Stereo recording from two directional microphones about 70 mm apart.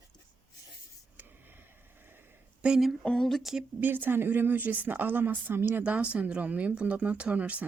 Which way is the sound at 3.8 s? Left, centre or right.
Right.